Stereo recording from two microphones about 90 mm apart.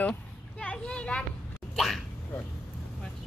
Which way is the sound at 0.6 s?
10° left (ahead or behind).